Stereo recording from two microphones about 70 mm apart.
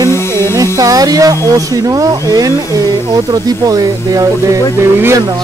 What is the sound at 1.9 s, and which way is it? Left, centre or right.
Speech, right.